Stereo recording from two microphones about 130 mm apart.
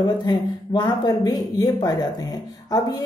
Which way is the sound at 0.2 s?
35° left (ahead or behind).